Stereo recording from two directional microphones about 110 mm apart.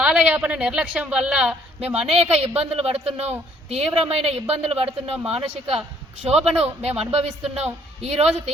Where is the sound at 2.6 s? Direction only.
60° right (ahead or behind).